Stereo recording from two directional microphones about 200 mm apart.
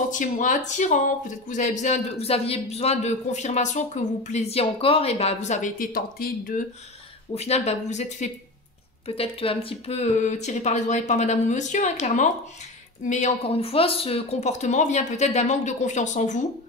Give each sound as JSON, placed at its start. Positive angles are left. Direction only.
{"t": 0.1, "sound": "speech", "side_deg": 40}
{"t": 7.3, "sound": "speech", "side_deg": 30}